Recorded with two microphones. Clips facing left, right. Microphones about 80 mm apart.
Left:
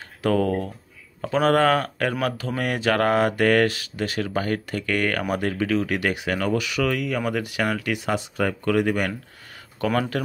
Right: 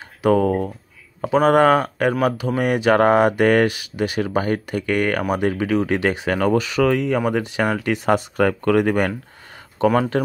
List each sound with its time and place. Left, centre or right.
0.2 s speech: centre; by 9.1 s right
9.9 s speech: right